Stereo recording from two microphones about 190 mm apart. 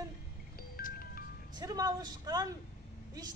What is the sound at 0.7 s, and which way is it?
Music, 50° left (ahead or behind).